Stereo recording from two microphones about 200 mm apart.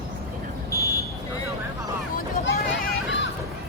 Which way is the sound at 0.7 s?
15° left (ahead or behind).